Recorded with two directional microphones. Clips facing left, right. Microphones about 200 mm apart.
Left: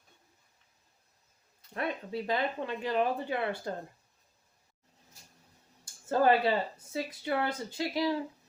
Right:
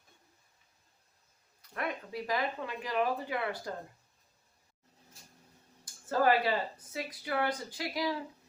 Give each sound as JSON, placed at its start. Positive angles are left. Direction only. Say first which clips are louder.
{"t": 1.7, "sound": "speech", "louder": "left 3 dB", "side_deg": 25}
{"t": 5.8, "sound": "a sound", "louder": "left 2 dB", "side_deg": 25}
{"t": 6.9, "sound": "speech", "louder": "left 3 dB", "side_deg": 25}